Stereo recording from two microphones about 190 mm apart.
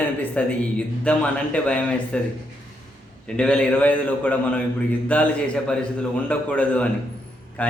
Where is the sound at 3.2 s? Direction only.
5° left (ahead or behind).